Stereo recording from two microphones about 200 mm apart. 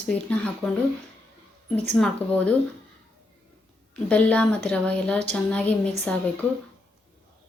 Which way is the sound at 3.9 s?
5° left (ahead or behind).